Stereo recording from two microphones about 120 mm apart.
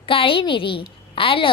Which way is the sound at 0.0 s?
50° left (ahead or behind).